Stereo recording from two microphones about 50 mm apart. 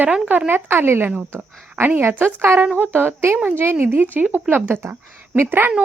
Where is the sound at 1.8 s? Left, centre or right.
Right.